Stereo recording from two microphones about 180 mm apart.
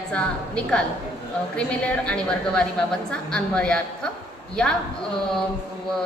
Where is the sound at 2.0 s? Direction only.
5° left (ahead or behind).